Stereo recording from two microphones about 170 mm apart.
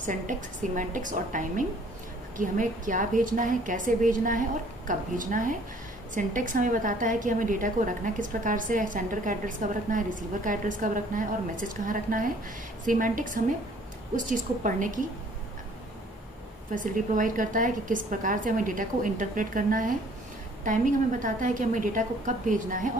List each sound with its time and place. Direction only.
0.0 s a woman's voice: 50° right (ahead or behind)
16.7 s a woman's voice: 50° right (ahead or behind)